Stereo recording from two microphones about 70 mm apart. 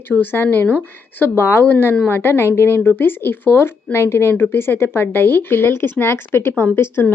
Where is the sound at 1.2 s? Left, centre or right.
Left.